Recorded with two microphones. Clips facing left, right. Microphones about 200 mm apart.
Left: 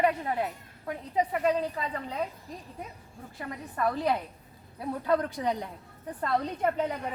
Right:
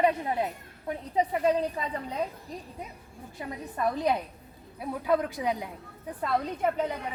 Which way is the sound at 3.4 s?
20° right (ahead or behind).